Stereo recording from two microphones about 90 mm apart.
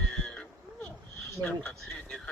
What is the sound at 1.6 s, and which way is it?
Speech, 10° left (ahead or behind).